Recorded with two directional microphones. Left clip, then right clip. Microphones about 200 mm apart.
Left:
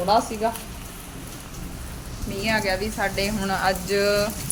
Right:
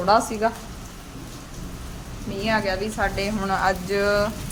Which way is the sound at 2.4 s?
10° right (ahead or behind).